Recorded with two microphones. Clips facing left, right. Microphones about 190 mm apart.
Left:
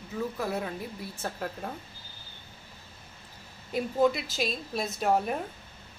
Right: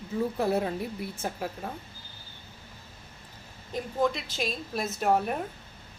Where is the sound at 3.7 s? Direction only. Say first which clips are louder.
Left 3 dB; 5° left (ahead or behind).